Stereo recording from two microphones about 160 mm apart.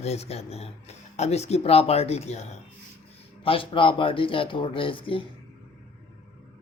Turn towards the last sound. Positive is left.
turn(degrees=35)  # may be behind; listen again after turning